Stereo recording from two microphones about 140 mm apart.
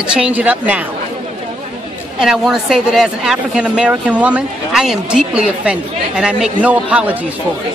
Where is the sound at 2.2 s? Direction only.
5° right (ahead or behind).